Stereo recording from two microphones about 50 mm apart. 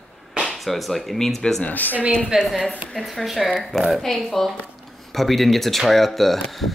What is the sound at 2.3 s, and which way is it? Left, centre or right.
Speech, centre.